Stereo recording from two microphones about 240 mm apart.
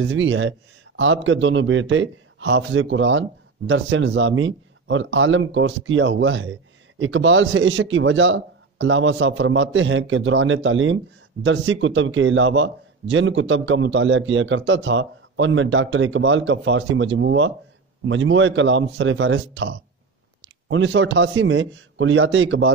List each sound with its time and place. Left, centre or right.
0.0 s a man's voice: right